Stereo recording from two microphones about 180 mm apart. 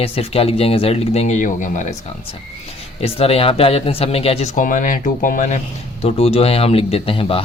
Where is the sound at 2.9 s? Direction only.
35° left (ahead or behind).